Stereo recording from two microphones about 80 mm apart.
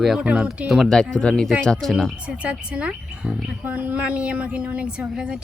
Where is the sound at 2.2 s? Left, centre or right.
Centre.